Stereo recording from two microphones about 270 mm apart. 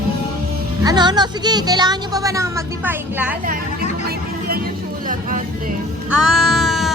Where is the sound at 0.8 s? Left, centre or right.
Centre.